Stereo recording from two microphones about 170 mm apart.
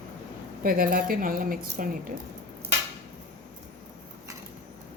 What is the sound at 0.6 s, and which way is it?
A woman's voice, 55° right (ahead or behind).